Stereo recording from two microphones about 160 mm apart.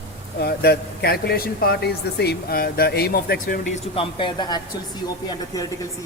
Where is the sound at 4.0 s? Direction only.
30° left (ahead or behind).